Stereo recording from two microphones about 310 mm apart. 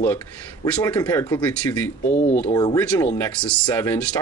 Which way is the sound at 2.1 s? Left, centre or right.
Left.